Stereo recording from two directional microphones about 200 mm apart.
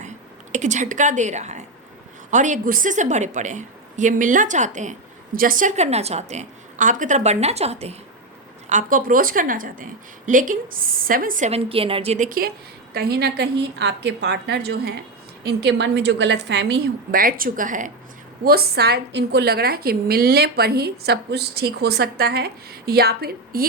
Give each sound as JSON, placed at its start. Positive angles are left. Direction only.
{"t": 0.5, "sound": "a woman's voice", "side_deg": -35}
{"t": 8.7, "sound": "a woman's voice", "side_deg": -45}
{"t": 12.9, "sound": "a woman's voice", "side_deg": -55}
{"t": 18.4, "sound": "a woman's voice", "side_deg": -50}